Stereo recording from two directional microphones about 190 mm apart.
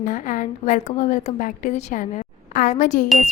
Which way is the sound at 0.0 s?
45° left (ahead or behind).